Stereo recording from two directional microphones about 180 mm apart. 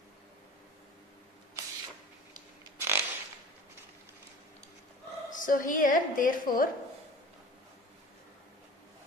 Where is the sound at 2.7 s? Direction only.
15° right (ahead or behind).